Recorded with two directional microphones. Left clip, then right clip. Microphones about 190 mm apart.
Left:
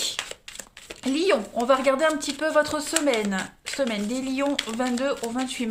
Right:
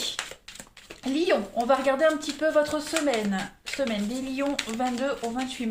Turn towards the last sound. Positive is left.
turn(degrees=45)  # may be behind; listen again after turning